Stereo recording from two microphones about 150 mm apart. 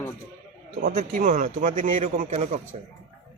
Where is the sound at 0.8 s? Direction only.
70° right (ahead or behind); by 2.6 s 50° right (ahead or behind).